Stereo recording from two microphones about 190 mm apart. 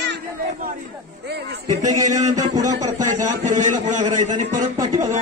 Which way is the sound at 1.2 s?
60° right (ahead or behind).